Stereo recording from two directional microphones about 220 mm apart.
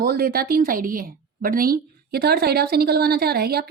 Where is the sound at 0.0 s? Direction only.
45° right (ahead or behind).